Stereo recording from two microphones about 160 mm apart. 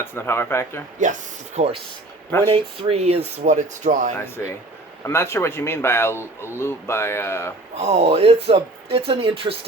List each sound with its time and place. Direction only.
0.0 s speech: 15° left (ahead or behind)
1.0 s speech: 50° right (ahead or behind)
1.5 s speech: 40° right (ahead or behind)
5.0 s speech: 15° left (ahead or behind)
7.8 s speech: 45° right (ahead or behind)